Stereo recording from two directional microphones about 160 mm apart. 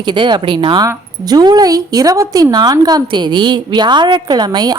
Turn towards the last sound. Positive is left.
turn(degrees=-25)  # may be behind; listen again after turning